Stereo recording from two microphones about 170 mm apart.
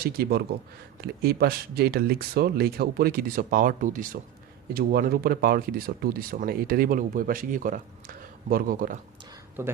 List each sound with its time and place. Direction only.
0.0 s speech: 65° right (ahead or behind)
4.7 s speech: 60° right (ahead or behind)
9.6 s speech: 10° right (ahead or behind)